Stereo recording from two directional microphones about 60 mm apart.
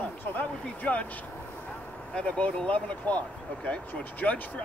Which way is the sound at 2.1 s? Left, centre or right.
Centre.